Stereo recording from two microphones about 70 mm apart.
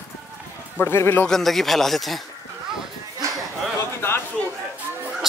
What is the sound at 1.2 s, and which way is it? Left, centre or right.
Speech, centre.